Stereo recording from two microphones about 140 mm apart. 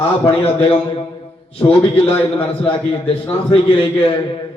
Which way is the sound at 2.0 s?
40° left (ahead or behind).